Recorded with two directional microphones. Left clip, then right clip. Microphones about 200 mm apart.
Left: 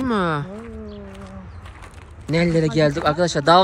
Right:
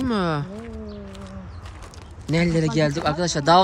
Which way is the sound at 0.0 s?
5° right (ahead or behind).